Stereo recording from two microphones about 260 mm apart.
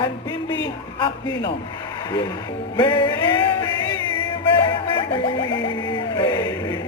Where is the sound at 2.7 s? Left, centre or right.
Centre.